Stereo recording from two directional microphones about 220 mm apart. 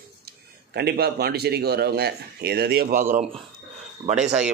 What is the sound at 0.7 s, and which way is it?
Speech, 45° right (ahead or behind).